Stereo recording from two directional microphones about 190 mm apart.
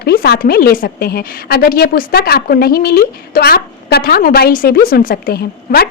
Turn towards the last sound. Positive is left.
turn(degrees=50)  # may be behind; listen again after turning